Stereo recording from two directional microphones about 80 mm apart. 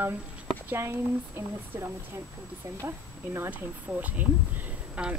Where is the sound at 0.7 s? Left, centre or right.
Right.